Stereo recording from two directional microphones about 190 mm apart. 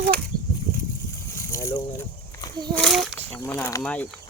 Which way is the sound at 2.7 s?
Centre (ahead or behind).